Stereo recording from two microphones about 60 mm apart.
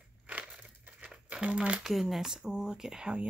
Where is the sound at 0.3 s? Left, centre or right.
Right.